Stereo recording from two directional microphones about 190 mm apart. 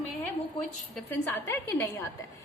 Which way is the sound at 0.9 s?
10° left (ahead or behind).